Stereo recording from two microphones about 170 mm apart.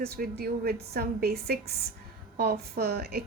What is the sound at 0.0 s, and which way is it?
A woman's voice, 65° right (ahead or behind).